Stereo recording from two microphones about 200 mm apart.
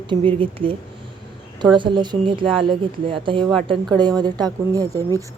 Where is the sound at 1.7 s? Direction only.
25° right (ahead or behind).